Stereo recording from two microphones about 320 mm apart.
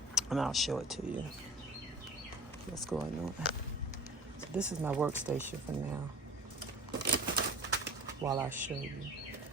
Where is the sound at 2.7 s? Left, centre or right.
Centre.